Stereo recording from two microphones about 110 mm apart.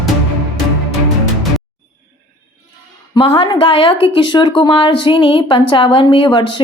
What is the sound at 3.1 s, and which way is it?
A woman's voice, 50° left (ahead or behind).